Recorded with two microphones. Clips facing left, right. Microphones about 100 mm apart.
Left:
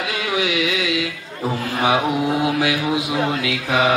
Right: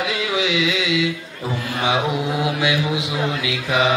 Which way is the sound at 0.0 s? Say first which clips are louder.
Even; 25° right (ahead or behind).